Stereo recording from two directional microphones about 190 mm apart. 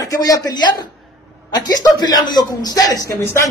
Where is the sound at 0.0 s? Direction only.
15° left (ahead or behind).